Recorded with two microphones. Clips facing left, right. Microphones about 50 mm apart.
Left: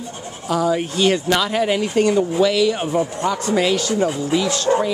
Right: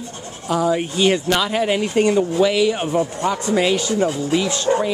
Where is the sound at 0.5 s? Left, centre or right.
Centre.